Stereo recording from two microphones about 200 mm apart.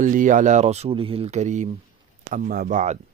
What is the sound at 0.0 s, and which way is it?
Speech, 40° right (ahead or behind).